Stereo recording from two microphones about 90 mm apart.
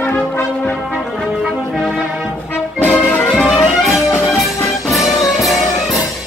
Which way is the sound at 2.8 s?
20° left (ahead or behind).